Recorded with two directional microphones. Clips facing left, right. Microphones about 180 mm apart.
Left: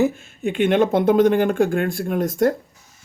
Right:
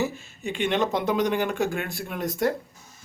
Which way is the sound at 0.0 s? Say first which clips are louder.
Left 8 dB; 55° left (ahead or behind).